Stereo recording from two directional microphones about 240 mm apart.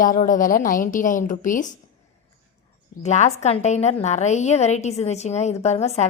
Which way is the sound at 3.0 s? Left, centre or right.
Left.